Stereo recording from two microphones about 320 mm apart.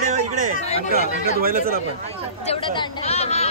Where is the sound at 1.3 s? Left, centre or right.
Right.